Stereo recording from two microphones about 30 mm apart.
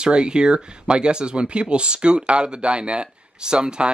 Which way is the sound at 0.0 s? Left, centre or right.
Right.